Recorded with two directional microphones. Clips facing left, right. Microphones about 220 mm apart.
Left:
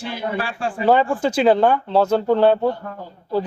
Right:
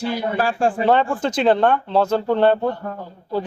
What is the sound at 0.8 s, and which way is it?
Speech, 5° left (ahead or behind).